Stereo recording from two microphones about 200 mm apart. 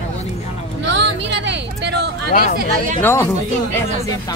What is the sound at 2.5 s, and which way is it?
Speech, 45° right (ahead or behind).